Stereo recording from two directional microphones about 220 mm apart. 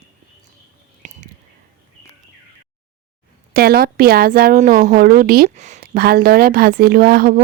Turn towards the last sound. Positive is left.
turn(degrees=-45)  # may be behind; listen again after turning